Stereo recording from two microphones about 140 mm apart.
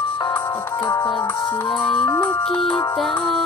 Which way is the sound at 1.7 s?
5° left (ahead or behind).